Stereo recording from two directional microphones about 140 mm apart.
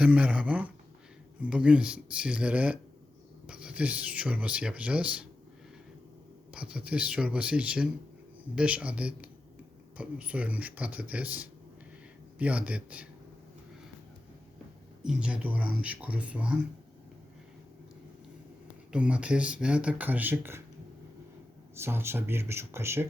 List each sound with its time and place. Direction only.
0.0 s speech: 10° right (ahead or behind)
6.5 s speech: 10° right (ahead or behind)
15.0 s speech: 5° right (ahead or behind)
18.9 s speech: 10° right (ahead or behind)
21.8 s speech: 15° right (ahead or behind)